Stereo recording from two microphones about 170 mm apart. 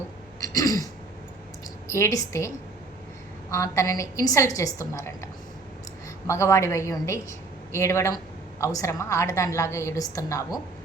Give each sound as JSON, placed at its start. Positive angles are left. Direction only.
{"t": 0.3, "sound": "throat clearing", "side_deg": 20}
{"t": 1.9, "sound": "a woman's voice", "side_deg": 15}
{"t": 3.5, "sound": "a woman's voice", "side_deg": 15}